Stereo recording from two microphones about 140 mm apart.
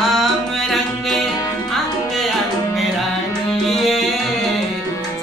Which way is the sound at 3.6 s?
Centre (ahead or behind).